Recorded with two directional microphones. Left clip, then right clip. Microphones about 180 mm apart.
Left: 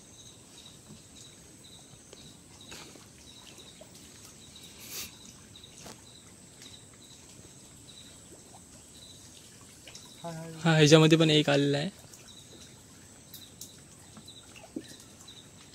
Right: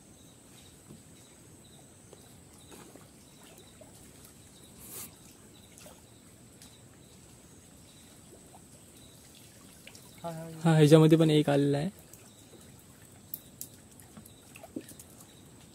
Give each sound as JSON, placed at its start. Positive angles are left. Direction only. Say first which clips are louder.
{"t": 10.2, "sound": "speech", "louder": "left 1 dB", "side_deg": -20}